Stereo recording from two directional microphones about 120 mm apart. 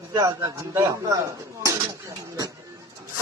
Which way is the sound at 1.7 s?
30° right (ahead or behind).